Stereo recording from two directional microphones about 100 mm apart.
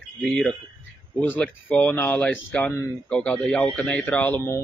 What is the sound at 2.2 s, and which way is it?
Speech, 10° left (ahead or behind).